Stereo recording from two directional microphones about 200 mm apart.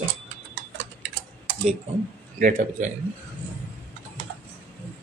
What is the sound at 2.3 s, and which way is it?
Speech, 40° right (ahead or behind).